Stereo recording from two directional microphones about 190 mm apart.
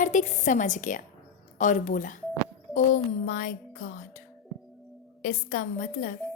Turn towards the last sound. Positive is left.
turn(degrees=45)  # may be behind; listen again after turning